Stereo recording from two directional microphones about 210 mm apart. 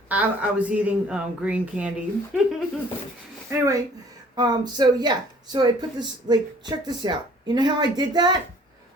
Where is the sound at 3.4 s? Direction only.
15° right (ahead or behind).